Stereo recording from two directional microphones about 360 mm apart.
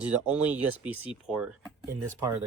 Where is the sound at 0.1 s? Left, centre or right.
Centre.